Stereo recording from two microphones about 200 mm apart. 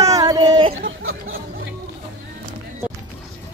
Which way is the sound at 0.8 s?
80° right.